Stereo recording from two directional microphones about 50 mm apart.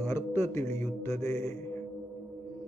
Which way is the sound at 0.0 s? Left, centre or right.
Left.